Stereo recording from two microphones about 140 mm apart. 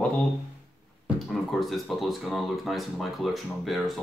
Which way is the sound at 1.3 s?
Centre (ahead or behind).